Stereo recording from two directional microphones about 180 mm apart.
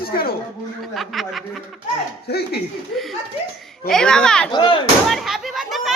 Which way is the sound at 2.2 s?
60° left (ahead or behind).